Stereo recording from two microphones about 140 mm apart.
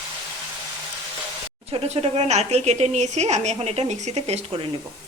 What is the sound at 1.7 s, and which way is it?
A woman's voice, 45° right (ahead or behind).